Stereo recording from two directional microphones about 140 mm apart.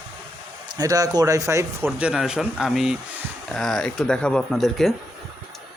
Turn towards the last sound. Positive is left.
turn(degrees=0)  # may be behind; listen again after turning